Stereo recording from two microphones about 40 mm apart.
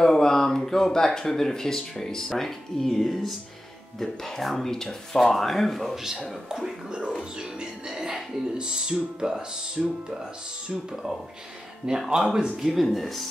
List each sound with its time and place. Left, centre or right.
0.0 s speech: centre
5.9 s speech: centre
7.3 s music: centre
9.5 s speech: right; by 13.3 s centre